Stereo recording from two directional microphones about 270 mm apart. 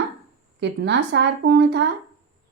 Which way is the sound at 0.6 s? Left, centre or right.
Right.